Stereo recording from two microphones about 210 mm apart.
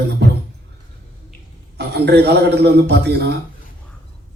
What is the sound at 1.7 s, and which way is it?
A man's voice, 50° right (ahead or behind).